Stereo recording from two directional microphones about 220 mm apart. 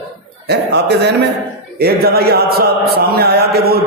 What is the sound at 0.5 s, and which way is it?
Chant, 50° right (ahead or behind).